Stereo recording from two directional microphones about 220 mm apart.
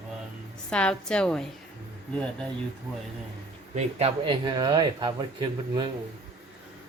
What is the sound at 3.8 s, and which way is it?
Speech, 25° right (ahead or behind).